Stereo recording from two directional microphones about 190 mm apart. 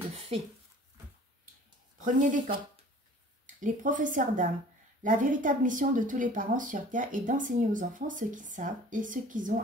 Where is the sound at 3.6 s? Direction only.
45° right (ahead or behind).